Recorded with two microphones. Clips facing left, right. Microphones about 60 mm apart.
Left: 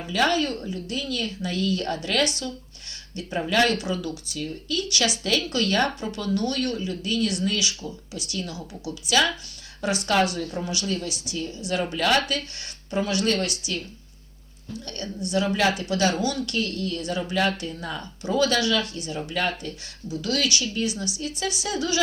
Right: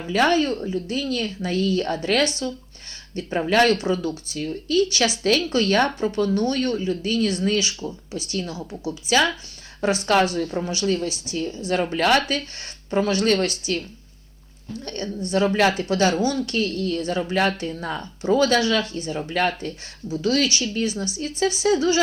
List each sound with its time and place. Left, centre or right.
0.1 s speech: right